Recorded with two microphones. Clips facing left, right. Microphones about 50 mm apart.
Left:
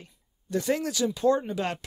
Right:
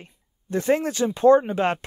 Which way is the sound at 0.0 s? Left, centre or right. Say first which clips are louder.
Right 4 dB; right.